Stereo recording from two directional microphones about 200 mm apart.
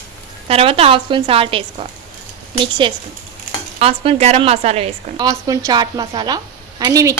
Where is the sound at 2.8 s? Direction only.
25° right (ahead or behind).